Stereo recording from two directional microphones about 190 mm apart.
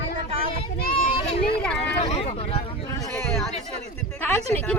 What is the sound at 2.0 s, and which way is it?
Speech, 30° left (ahead or behind).